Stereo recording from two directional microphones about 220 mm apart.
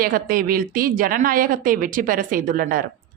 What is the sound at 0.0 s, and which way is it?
Speech, 40° right (ahead or behind).